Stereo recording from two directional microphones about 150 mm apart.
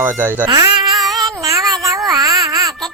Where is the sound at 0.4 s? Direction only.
25° right (ahead or behind).